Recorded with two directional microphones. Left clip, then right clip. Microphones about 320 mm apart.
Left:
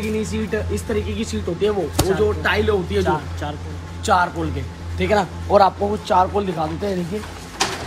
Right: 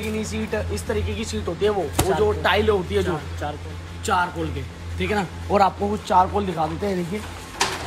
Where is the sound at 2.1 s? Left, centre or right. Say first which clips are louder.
Even; right.